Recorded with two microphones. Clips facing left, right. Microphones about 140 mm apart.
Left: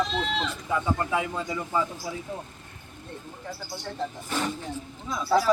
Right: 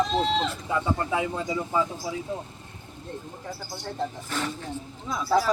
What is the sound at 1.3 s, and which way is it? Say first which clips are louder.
Speech: right 2 dB; 15° right (ahead or behind).